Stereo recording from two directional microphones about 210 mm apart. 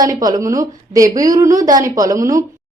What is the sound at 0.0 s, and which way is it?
A woman's voice, 15° right (ahead or behind).